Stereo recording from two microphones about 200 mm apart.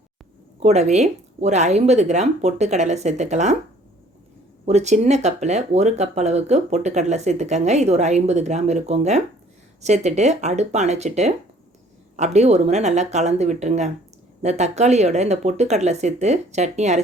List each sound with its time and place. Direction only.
0.6 s speech: 35° right (ahead or behind)
4.6 s speech: 35° right (ahead or behind)